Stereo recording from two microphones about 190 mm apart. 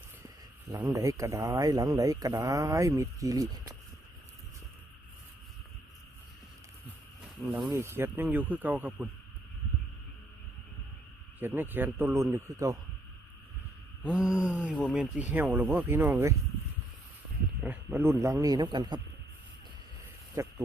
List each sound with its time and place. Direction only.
0.7 s speech: 15° right (ahead or behind)
7.4 s speech: 10° right (ahead or behind)
11.3 s speech: 10° right (ahead or behind)
14.0 s speech: 5° right (ahead or behind)
17.6 s speech: 10° right (ahead or behind)
20.3 s speech: 15° right (ahead or behind)